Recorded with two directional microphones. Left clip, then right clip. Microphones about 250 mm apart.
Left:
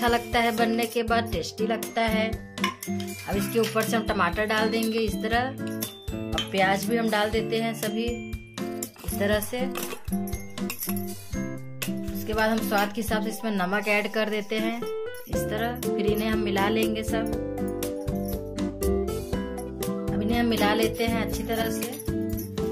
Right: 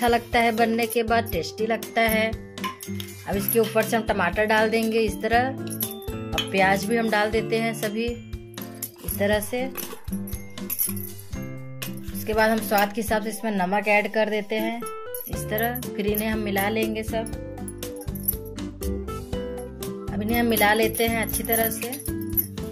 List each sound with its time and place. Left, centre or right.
0.0 s speech: centre
9.2 s speech: centre
12.3 s speech: right; by 17.8 s centre
18.6 s music: centre
20.2 s speech: centre
22.0 s music: centre